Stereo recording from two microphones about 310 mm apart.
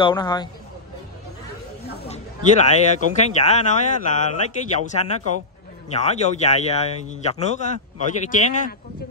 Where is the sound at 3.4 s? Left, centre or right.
Left.